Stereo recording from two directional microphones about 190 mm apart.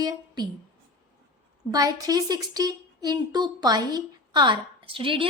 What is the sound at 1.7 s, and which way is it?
A woman's voice, 20° right (ahead or behind).